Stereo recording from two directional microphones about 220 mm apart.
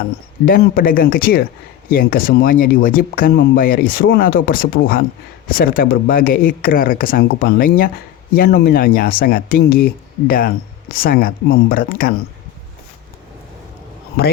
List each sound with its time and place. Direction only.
0.4 s speech: 40° left (ahead or behind)